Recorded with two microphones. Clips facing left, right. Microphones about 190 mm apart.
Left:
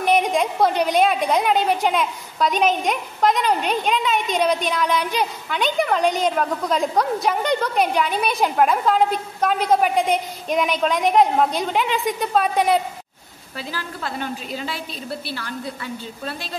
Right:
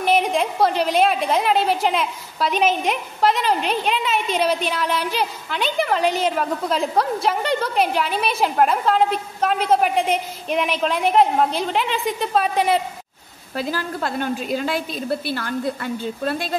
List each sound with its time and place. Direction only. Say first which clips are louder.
0.2 s a woman's voice: even; centre (ahead or behind)
13.6 s a woman's voice: right 6 dB; 45° right (ahead or behind)